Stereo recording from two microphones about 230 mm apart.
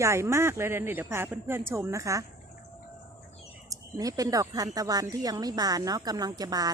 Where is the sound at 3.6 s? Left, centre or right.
Centre.